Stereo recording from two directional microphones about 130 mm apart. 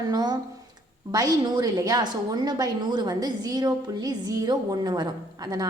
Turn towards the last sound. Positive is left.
turn(degrees=-30)  # may be behind; listen again after turning